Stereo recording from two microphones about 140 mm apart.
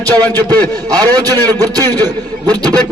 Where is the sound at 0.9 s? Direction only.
25° right (ahead or behind).